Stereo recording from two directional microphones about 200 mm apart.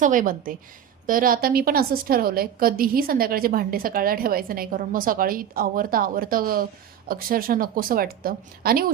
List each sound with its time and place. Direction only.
0.0 s a woman's voice: 40° right (ahead or behind)